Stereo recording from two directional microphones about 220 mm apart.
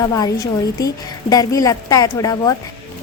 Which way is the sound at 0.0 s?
15° left (ahead or behind).